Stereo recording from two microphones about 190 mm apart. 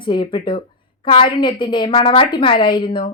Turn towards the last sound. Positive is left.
turn(degrees=25)  # may be behind; listen again after turning